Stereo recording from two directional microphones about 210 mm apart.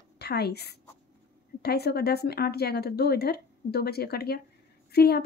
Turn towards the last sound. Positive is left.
turn(degrees=50)  # may be behind; listen again after turning